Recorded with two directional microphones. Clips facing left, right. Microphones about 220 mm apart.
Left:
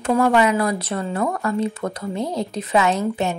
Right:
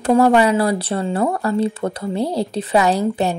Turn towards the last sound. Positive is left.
turn(degrees=-35)  # may be behind; listen again after turning